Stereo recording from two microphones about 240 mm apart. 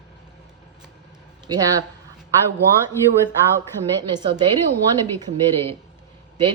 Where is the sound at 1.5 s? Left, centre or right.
Centre.